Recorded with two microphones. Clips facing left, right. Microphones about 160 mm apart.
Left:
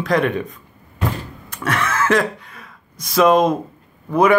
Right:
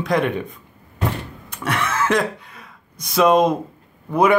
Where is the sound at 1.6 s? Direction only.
15° right (ahead or behind).